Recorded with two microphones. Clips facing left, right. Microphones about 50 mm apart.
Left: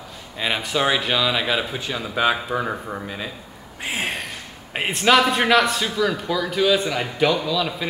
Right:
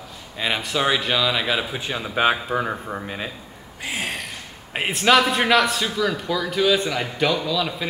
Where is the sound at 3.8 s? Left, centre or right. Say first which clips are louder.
Left 2 dB; left.